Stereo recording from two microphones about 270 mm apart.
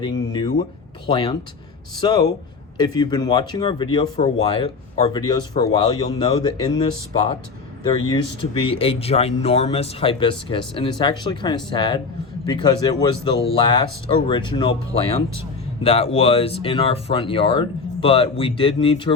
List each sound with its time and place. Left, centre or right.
0.3 s speech: centre